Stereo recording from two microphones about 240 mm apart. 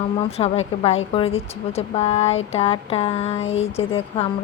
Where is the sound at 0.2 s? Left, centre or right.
Left.